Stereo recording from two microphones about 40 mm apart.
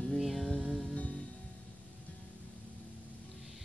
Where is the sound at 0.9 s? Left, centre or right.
Left.